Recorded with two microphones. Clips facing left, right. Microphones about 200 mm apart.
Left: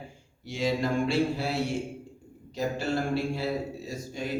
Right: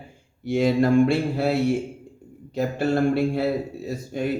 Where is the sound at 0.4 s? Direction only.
55° right (ahead or behind).